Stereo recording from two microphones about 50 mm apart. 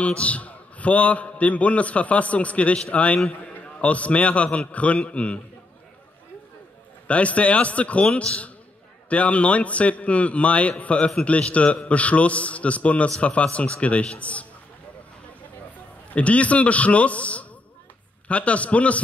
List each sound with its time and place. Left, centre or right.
0.0 s a man's voice: left
7.1 s a man's voice: left
16.1 s a man's voice: left